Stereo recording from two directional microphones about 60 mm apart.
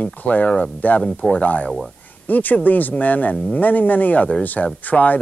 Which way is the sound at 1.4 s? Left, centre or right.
Left.